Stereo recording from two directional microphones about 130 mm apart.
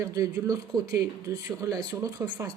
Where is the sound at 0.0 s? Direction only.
25° right (ahead or behind).